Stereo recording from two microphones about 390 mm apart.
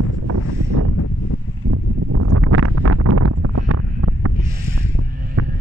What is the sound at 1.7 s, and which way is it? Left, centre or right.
Wind noise, right.